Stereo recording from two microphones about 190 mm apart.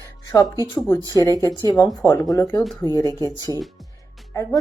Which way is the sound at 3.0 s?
20° right (ahead or behind).